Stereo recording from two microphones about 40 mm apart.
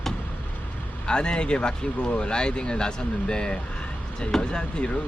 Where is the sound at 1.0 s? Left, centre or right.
Left.